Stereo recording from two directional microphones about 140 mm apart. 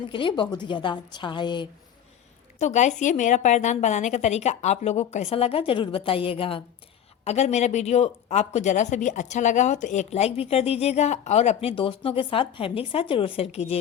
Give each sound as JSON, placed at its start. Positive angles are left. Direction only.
{"t": 0.1, "sound": "a woman's voice", "side_deg": 35}
{"t": 2.6, "sound": "a woman's voice", "side_deg": 55}
{"t": 7.3, "sound": "speech", "side_deg": 55}